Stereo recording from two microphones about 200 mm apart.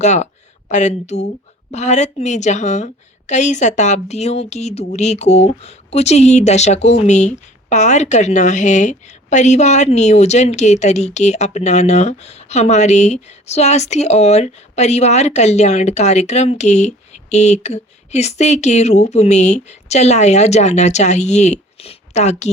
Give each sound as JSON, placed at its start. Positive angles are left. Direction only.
{"t": 0.0, "sound": "a woman's voice", "side_deg": 35}